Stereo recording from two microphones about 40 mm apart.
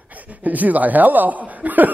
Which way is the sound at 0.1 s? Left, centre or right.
Right.